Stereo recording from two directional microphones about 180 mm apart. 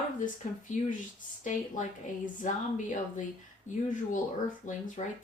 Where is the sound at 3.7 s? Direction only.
45° left (ahead or behind).